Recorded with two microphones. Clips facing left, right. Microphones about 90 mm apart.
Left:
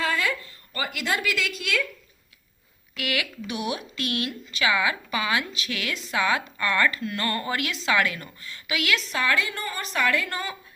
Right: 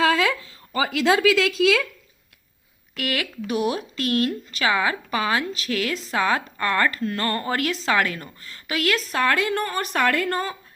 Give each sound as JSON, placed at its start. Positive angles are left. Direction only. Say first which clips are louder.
{"t": 0.0, "sound": "a sound", "louder": "right 6 dB", "side_deg": -90}
{"t": 1.0, "sound": "a woman's voice", "louder": "right 9 dB", "side_deg": -90}
{"t": 2.9, "sound": "speech", "louder": "right 2 dB", "side_deg": -40}